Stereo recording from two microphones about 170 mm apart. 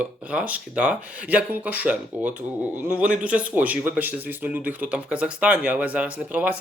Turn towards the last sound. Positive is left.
turn(degrees=-10)  # may be behind; listen again after turning